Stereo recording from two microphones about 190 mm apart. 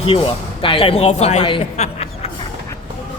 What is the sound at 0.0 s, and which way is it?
Speech, 30° left (ahead or behind).